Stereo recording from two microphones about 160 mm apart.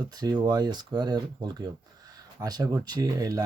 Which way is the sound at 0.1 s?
25° right (ahead or behind).